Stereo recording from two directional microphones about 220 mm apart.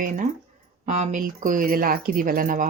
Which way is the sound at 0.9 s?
35° right (ahead or behind).